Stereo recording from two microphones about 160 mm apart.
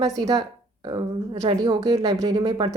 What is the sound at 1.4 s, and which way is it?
A woman's voice, 25° right (ahead or behind).